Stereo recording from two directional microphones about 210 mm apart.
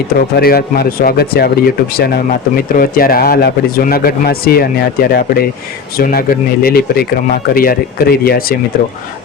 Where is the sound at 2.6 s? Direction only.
45° left (ahead or behind).